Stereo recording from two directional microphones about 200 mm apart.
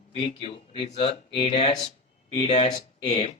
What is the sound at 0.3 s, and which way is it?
Speech, 30° left (ahead or behind).